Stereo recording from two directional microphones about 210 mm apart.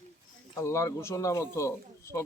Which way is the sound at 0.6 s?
15° left (ahead or behind).